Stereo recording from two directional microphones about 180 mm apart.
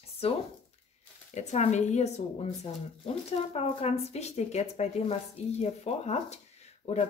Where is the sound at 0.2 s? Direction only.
35° left (ahead or behind).